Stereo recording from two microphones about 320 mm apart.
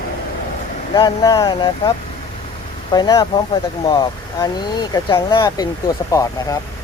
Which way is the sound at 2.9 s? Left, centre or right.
Centre.